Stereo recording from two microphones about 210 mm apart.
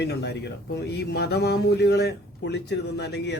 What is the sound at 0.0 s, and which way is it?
Speech, 50° left (ahead or behind).